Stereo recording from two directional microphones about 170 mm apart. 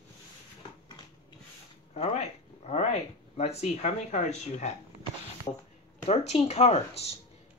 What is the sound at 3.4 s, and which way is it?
Speech, 40° left (ahead or behind).